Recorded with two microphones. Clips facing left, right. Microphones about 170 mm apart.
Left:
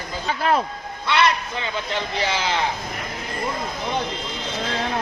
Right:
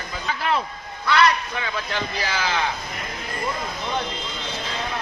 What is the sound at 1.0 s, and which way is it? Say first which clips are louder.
Speech: right 1 dB; 25° left (ahead or behind).